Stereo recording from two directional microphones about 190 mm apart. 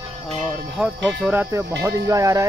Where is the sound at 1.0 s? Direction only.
5° right (ahead or behind).